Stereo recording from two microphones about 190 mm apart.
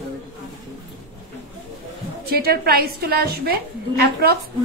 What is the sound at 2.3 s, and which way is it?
A woman's voice, 55° right (ahead or behind).